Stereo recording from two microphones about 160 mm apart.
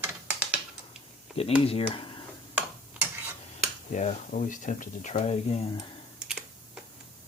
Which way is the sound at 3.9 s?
50° left (ahead or behind).